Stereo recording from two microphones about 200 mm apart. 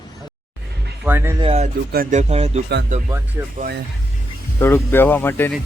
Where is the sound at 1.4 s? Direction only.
30° right (ahead or behind).